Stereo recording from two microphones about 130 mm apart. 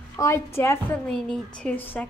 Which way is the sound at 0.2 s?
25° left (ahead or behind).